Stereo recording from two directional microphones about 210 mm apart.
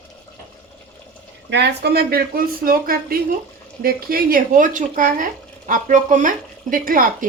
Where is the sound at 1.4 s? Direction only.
55° right (ahead or behind).